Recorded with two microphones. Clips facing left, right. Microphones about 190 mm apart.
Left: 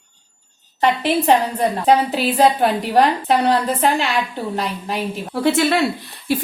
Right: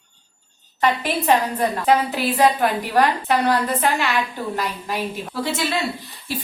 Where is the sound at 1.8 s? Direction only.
35° left (ahead or behind).